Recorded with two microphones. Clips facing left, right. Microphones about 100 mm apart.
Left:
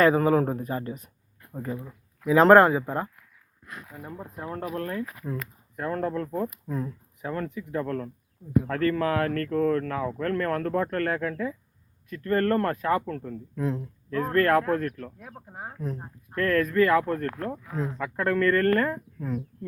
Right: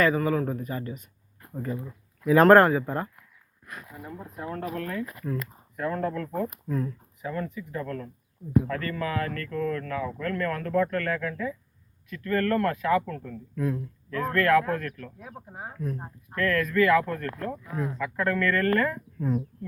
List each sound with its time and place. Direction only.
0.0 s speech: 40° left (ahead or behind)
1.5 s speech: 15° left (ahead or behind)
4.0 s speech: 30° left (ahead or behind)
6.7 s speech: 15° left (ahead or behind)
7.2 s speech: 50° left (ahead or behind); by 15.1 s 30° left (ahead or behind)
15.2 s speech: centre (ahead or behind)
16.4 s speech: 35° left (ahead or behind)
17.7 s speech: 25° left (ahead or behind)
18.0 s speech: 35° left (ahead or behind)